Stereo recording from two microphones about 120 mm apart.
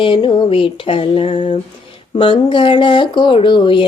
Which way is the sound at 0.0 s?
45° left (ahead or behind).